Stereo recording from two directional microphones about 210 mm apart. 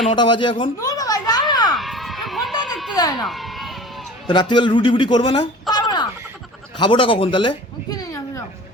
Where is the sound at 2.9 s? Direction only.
20° left (ahead or behind).